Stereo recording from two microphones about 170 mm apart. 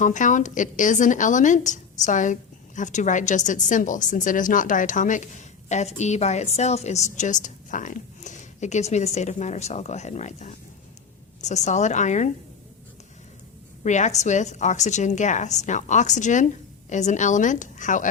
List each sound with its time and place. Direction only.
0.0 s a woman's voice: 45° left (ahead or behind)
13.8 s a woman's voice: 45° left (ahead or behind)